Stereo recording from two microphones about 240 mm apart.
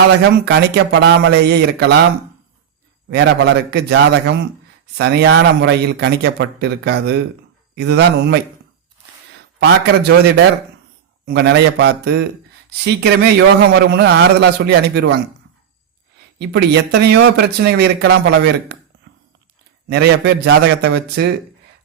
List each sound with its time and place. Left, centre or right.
0.3 s speech: right
3.1 s speech: right
9.6 s speech: right
19.9 s speech: right